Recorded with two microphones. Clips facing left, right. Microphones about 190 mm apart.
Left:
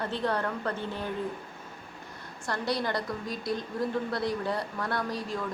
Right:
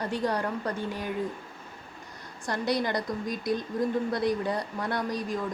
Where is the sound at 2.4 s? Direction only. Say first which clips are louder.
Right 2 dB; 20° right (ahead or behind).